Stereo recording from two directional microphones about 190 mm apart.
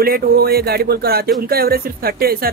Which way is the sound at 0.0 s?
55° right (ahead or behind).